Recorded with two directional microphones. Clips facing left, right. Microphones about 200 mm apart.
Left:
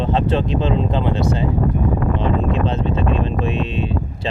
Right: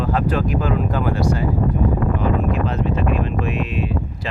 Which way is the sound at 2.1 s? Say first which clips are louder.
Left 1 dB; 25° left (ahead or behind).